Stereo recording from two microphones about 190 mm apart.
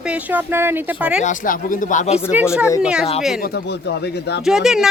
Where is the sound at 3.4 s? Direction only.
55° left (ahead or behind).